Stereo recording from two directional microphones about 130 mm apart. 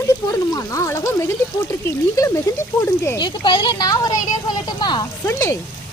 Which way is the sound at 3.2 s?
35° left (ahead or behind).